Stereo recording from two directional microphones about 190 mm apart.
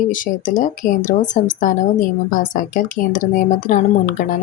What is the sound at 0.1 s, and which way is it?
A woman's voice, 45° left (ahead or behind).